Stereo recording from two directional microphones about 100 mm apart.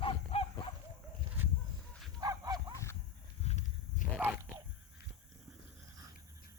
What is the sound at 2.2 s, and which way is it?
Dog, 40° right (ahead or behind).